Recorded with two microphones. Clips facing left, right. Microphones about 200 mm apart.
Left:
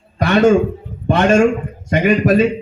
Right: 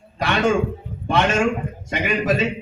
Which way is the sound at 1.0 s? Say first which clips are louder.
Left 7 dB; 50° left (ahead or behind).